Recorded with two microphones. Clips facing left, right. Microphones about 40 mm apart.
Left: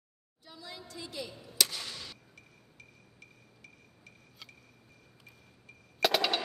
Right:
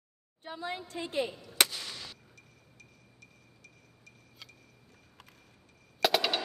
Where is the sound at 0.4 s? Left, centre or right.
Right.